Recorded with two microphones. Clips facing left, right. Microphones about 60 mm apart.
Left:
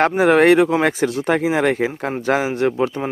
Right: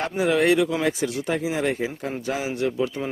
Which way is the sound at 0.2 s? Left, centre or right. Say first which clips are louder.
Left 5 dB; left.